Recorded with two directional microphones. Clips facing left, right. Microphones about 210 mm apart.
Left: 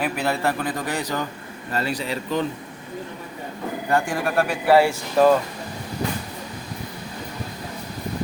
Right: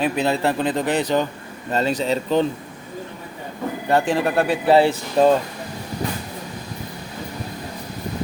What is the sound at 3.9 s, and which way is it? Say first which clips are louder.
Speech: right 3 dB; 20° right (ahead or behind).